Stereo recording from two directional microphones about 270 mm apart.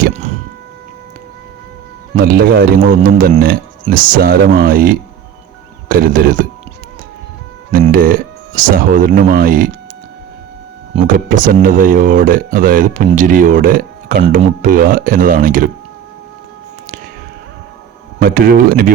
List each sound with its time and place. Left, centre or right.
0.0 s a sound: right
2.1 s a man's voice: right
7.7 s speech: right
10.9 s speech: right
18.2 s a man's voice: right